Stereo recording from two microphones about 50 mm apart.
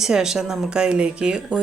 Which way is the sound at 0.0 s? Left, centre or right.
Centre.